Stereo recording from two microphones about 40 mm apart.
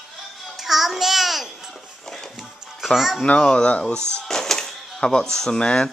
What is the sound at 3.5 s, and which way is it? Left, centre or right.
Speech, left.